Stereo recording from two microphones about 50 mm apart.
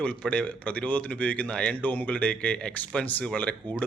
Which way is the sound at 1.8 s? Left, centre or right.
Left.